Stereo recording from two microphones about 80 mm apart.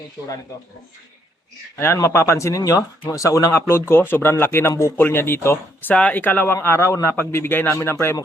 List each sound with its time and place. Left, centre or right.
1.8 s speech: left
5.9 s speech: centre